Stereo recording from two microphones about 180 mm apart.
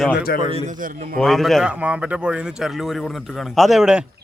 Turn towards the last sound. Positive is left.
turn(degrees=-5)  # may be behind; listen again after turning